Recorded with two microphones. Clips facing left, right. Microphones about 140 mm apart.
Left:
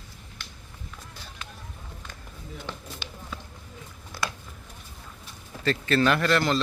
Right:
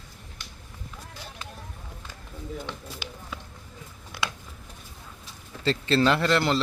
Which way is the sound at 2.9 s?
10° right (ahead or behind).